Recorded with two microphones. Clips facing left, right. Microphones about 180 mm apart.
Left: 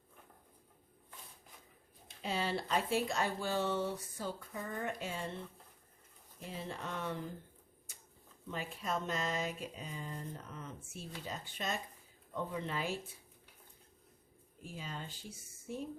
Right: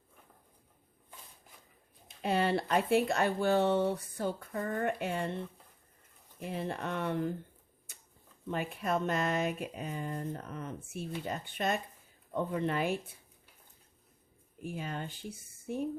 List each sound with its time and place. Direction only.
2.2 s speech: 60° right (ahead or behind)
6.4 s speech: 60° right (ahead or behind)
8.4 s speech: 60° right (ahead or behind)
14.6 s speech: 60° right (ahead or behind)